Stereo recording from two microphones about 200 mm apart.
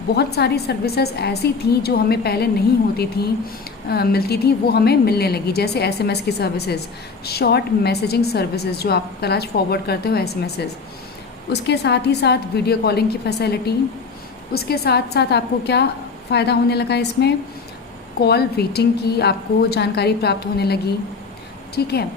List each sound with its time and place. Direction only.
0.2 s a woman's voice: 55° left (ahead or behind)
11.7 s a woman's voice: 55° left (ahead or behind)
21.8 s a woman's voice: 55° left (ahead or behind)